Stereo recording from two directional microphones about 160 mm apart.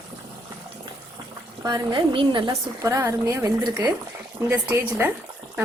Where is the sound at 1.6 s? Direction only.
25° right (ahead or behind).